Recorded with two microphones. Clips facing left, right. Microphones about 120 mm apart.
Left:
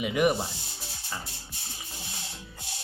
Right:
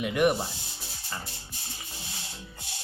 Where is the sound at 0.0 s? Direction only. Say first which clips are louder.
Even; centre (ahead or behind).